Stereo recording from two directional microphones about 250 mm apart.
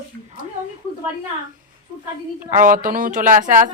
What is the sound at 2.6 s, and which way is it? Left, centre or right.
Speech, right.